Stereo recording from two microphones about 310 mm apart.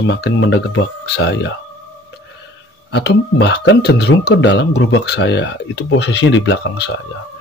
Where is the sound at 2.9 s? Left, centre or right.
Left.